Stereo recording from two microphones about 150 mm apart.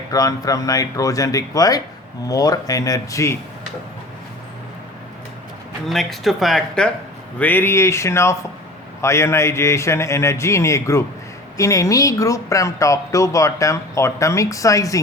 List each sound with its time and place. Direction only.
0.1 s speech: 25° left (ahead or behind)
5.9 s speech: centre (ahead or behind); by 14.9 s 20° left (ahead or behind)